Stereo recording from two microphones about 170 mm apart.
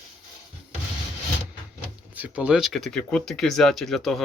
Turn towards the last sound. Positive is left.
turn(degrees=0)  # may be behind; listen again after turning